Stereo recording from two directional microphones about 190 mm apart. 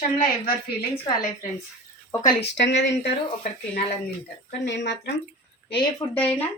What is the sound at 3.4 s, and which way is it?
Speech, 40° left (ahead or behind).